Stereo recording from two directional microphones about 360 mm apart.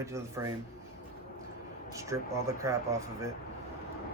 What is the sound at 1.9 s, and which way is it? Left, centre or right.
Speech, centre.